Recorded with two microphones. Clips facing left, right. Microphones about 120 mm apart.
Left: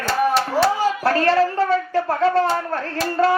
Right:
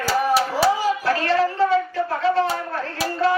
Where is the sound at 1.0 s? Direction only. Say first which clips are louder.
Left 3 dB; 45° left (ahead or behind).